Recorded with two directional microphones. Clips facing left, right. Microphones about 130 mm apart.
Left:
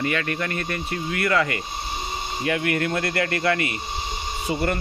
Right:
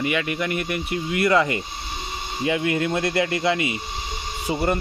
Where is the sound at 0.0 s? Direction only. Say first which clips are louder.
Right 1 dB; 10° right (ahead or behind).